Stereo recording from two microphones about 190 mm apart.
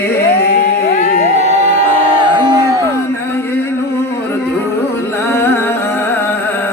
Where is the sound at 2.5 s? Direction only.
20° right (ahead or behind).